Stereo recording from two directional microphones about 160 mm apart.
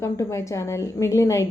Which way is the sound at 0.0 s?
20° left (ahead or behind).